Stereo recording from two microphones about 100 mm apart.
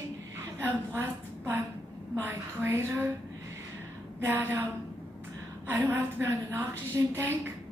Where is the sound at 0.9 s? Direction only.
20° right (ahead or behind).